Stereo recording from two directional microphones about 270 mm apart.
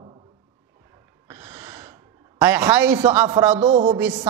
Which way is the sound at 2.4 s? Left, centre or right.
Centre.